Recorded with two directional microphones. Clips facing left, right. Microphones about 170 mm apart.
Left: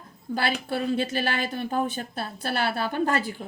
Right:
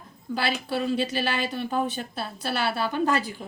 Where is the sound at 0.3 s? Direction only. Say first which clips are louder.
Even; 50° left (ahead or behind).